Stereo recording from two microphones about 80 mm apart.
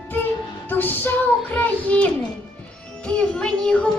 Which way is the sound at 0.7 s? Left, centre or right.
Left.